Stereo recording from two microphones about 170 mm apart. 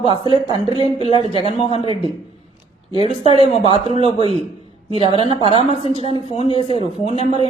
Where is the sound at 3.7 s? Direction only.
35° right (ahead or behind).